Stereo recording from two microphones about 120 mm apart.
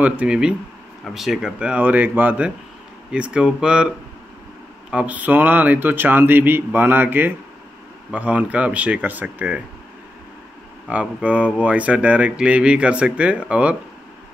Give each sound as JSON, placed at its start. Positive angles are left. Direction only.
{"t": 0.0, "sound": "speech", "side_deg": -10}
{"t": 4.9, "sound": "speech", "side_deg": -10}
{"t": 10.9, "sound": "speech", "side_deg": -10}